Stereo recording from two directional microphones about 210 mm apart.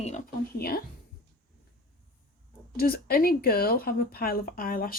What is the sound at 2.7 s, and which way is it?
Speech, 45° left (ahead or behind).